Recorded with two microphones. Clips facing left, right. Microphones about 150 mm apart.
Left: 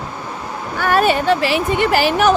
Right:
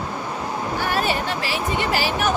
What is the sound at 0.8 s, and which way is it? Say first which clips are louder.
Speech: left 9 dB; 60° left (ahead or behind).